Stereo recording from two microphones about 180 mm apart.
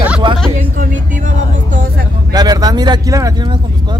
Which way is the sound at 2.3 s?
20° right (ahead or behind).